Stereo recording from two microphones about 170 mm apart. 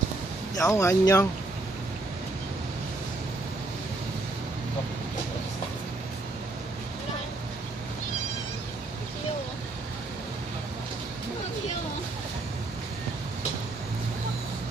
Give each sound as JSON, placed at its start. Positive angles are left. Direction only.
{"t": 0.5, "sound": "speech", "side_deg": 15}